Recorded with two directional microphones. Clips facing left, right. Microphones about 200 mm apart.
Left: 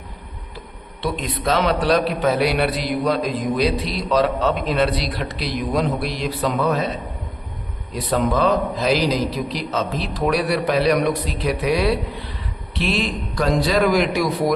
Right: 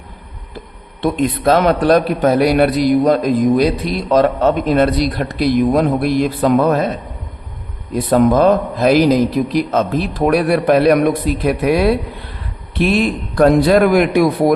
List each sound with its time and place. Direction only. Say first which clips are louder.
1.0 s a man's voice: right 8 dB; 50° right (ahead or behind)
7.9 s a man's voice: right 8 dB; 50° right (ahead or behind)